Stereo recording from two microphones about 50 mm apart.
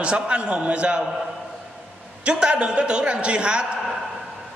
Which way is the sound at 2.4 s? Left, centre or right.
Right.